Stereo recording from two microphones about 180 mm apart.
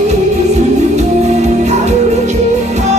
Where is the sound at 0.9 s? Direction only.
40° right (ahead or behind).